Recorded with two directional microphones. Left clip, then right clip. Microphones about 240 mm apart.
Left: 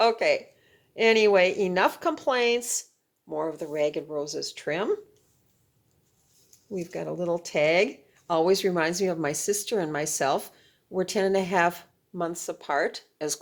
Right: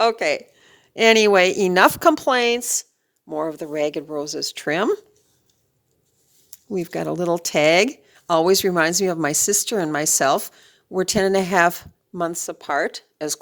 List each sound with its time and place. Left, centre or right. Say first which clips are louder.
0.0 s speech: right 3 dB; right
6.7 s speech: right 8 dB; right